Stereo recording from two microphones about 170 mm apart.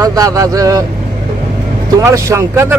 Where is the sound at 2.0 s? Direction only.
15° right (ahead or behind).